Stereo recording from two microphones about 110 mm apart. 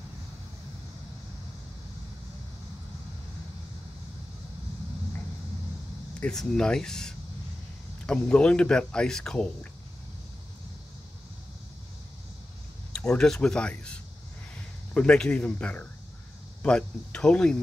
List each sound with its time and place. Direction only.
6.1 s speech: 5° left (ahead or behind)
12.9 s speech: 5° left (ahead or behind)
15.0 s speech: 10° left (ahead or behind)